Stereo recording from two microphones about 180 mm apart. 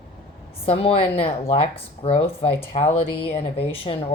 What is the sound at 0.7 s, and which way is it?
A woman's voice, 35° left (ahead or behind).